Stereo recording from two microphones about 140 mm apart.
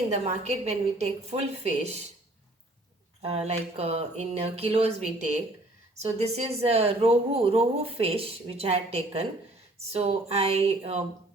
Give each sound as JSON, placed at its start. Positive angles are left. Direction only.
{"t": 0.1, "sound": "speech", "side_deg": -55}
{"t": 3.2, "sound": "speech", "side_deg": -50}